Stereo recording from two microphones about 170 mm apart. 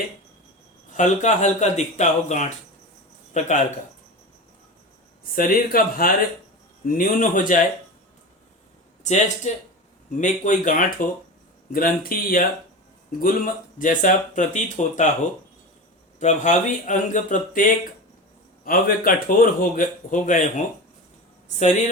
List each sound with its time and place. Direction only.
0.9 s a man's voice: 45° left (ahead or behind)
5.3 s a man's voice: 55° left (ahead or behind)
9.0 s a man's voice: 40° left (ahead or behind)
16.2 s a man's voice: 45° left (ahead or behind)